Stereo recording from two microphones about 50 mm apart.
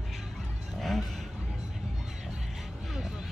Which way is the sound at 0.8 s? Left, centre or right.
Centre.